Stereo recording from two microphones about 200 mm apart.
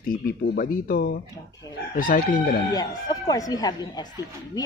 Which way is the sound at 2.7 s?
20° left (ahead or behind).